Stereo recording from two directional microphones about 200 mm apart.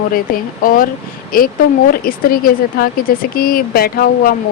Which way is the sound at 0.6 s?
45° left (ahead or behind).